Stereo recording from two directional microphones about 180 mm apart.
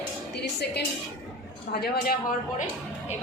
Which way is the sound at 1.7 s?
60° left (ahead or behind).